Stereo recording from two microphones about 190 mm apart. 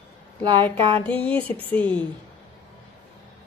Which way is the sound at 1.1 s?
5° left (ahead or behind).